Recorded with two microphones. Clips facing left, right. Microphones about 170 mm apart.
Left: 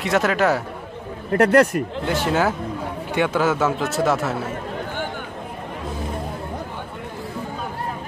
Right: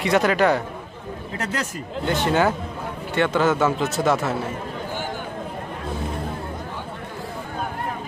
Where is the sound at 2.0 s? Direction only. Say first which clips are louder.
Right 2 dB; 5° left (ahead or behind).